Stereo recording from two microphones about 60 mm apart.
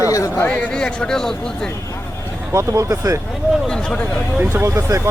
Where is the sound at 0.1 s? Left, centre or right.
Left.